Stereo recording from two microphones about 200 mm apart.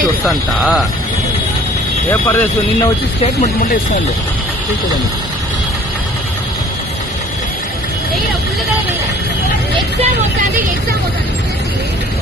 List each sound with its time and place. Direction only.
0.0 s speech: 5° right (ahead or behind)
2.0 s speech: 10° left (ahead or behind)
3.4 s speech: 45° left (ahead or behind)